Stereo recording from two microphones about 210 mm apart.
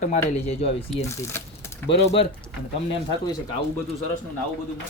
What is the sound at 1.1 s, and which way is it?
Speech, 15° left (ahead or behind).